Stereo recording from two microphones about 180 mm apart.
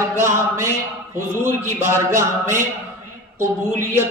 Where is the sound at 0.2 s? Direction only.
15° right (ahead or behind).